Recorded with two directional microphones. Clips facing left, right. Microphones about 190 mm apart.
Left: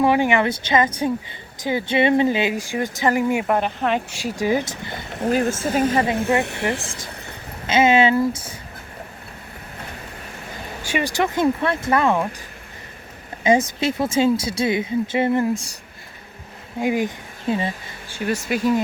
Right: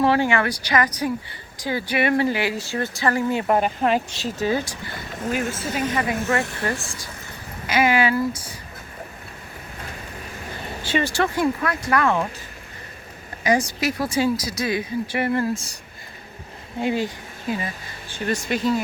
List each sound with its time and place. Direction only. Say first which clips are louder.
0.0 s speech: left 2 dB; 15° left (ahead or behind)
3.4 s speech: right 1 dB; 5° right (ahead or behind)
4.1 s speech: left 2 dB; 10° left (ahead or behind)
5.3 s speech: left 6 dB; 40° left (ahead or behind)
5.8 s speech: left 4 dB; 30° left (ahead or behind)
6.2 s speech: left 3 dB; 20° left (ahead or behind)
10.8 s speech: even; 15° left (ahead or behind)
13.4 s speech: left 3 dB; 25° left (ahead or behind)
16.8 s speech: left 2 dB; 15° left (ahead or behind)
17.5 s speech: left 4 dB; 25° left (ahead or behind)
18.1 s speech: left 1 dB; 10° left (ahead or behind)